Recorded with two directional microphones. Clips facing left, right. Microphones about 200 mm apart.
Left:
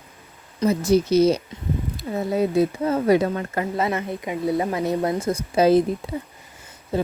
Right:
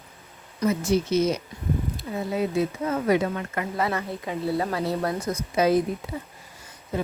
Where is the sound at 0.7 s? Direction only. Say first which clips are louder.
Left 5 dB; 35° left (ahead or behind).